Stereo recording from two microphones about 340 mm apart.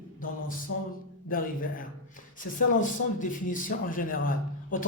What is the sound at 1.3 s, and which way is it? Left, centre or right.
Speech, left.